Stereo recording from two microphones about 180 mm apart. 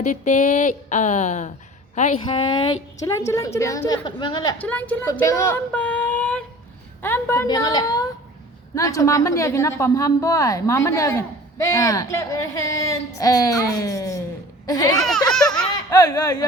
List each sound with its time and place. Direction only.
0.0 s speech: 40° left (ahead or behind)
3.1 s a woman's voice: 15° left (ahead or behind)
4.6 s a woman's voice: 10° left (ahead or behind)
15.3 s laughter: 5° left (ahead or behind)
15.9 s speech: 20° left (ahead or behind)